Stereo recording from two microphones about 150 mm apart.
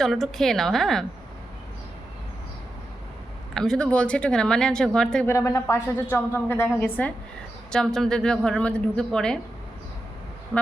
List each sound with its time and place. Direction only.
0.0 s a woman's voice: centre (ahead or behind)
3.5 s a woman's voice: 5° left (ahead or behind)
5.2 s a woman's voice: 20° left (ahead or behind); by 9.4 s 5° left (ahead or behind)
10.5 s a sound: 15° right (ahead or behind)